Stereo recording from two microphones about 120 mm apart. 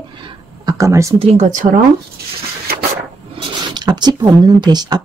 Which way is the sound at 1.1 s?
60° right (ahead or behind).